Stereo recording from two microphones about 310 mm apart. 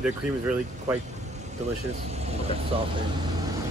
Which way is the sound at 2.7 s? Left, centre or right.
Centre.